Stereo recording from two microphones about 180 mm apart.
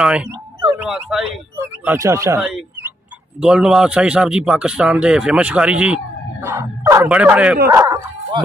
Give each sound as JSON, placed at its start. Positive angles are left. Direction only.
{"t": 0.0, "sound": "speech", "side_deg": -5}
{"t": 1.6, "sound": "speech", "side_deg": -15}
{"t": 3.3, "sound": "a man's voice", "side_deg": -5}